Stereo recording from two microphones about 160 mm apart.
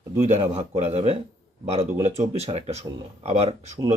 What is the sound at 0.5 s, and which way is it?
Speech, 45° right (ahead or behind).